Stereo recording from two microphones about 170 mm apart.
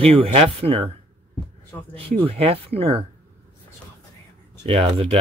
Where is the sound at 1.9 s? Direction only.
35° right (ahead or behind).